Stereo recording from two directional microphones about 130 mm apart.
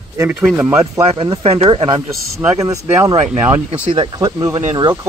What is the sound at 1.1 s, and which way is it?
Speech, 45° right (ahead or behind).